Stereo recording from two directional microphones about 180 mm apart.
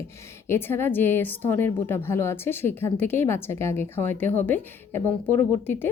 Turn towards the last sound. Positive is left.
turn(degrees=10)  # may be behind; listen again after turning